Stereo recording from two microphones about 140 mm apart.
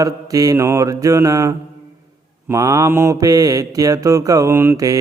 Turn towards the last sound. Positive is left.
turn(degrees=-20)  # may be behind; listen again after turning